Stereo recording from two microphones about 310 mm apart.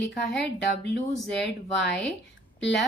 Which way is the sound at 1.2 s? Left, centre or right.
Centre.